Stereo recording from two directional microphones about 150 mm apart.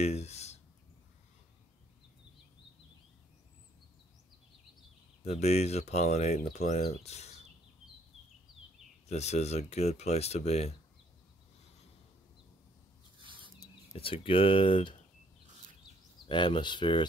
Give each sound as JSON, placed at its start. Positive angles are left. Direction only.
{"t": 0.0, "sound": "speech", "side_deg": 45}
{"t": 5.2, "sound": "speech", "side_deg": 45}
{"t": 9.0, "sound": "speech", "side_deg": 45}
{"t": 13.2, "sound": "a sound", "side_deg": -35}
{"t": 13.9, "sound": "speech", "side_deg": 35}
{"t": 16.3, "sound": "speech", "side_deg": 35}